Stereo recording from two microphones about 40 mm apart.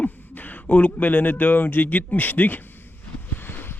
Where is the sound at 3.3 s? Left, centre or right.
Left.